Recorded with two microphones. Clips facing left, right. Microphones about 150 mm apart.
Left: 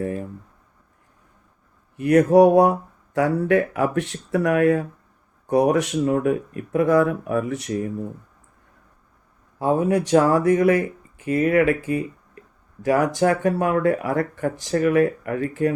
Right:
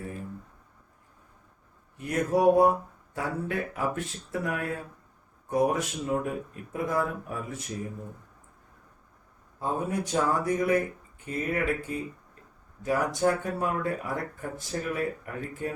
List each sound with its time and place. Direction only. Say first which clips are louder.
0.0 s speech: left 11 dB; 70° left (ahead or behind)
2.0 s speech: left 12 dB; 75° left (ahead or behind)
9.6 s speech: left 10 dB; 80° left
12.8 s speech: left 7 dB; 90° left